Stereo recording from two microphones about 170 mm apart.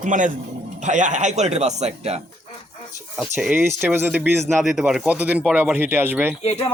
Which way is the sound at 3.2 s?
Centre (ahead or behind).